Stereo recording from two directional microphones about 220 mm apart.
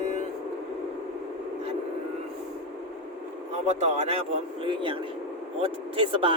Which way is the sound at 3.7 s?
30° right (ahead or behind).